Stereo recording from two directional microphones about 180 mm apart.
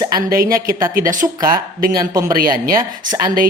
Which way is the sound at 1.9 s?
20° right (ahead or behind).